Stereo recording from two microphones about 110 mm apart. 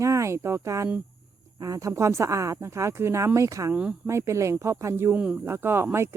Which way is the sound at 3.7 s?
10° right (ahead or behind).